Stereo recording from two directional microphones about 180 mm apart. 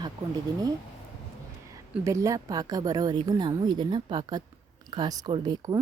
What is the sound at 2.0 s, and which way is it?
Speech, 15° right (ahead or behind).